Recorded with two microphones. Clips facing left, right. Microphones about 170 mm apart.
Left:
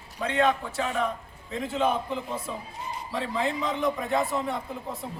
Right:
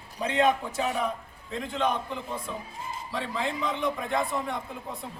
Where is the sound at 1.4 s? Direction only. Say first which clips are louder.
Left 2 dB; 5° left (ahead or behind).